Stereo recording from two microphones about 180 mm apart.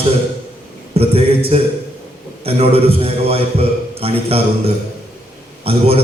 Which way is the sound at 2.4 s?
35° right (ahead or behind).